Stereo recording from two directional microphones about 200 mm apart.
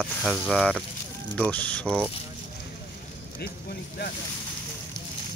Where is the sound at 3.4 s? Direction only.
50° left (ahead or behind).